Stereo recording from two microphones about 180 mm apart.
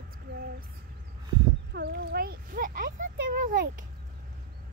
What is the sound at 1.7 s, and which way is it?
Speech, 65° right (ahead or behind).